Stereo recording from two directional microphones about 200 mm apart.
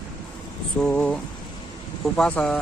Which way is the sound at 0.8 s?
5° left (ahead or behind).